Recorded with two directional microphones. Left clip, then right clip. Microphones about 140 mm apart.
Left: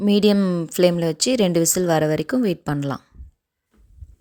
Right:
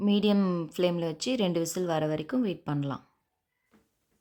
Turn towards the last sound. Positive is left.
turn(degrees=35)  # may be behind; listen again after turning